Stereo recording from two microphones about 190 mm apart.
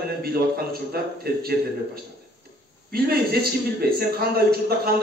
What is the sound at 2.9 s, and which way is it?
A man's voice, 55° right (ahead or behind).